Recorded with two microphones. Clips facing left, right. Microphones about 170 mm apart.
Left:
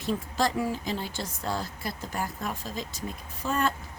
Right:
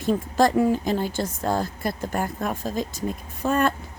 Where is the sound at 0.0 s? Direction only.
50° right (ahead or behind).